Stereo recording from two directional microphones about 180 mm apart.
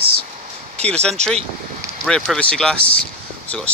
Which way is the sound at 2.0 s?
5° left (ahead or behind).